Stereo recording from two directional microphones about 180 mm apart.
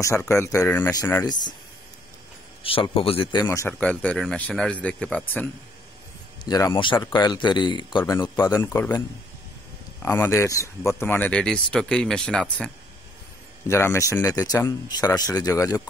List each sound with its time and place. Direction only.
0.0 s speech: 15° left (ahead or behind)
2.6 s speech: 30° left (ahead or behind); by 5.5 s 5° left (ahead or behind)
6.4 s speech: 20° left (ahead or behind)
10.0 s speech: 15° left (ahead or behind)